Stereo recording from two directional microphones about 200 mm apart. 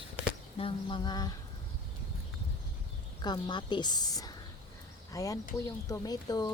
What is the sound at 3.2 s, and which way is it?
A woman's voice, 20° left (ahead or behind).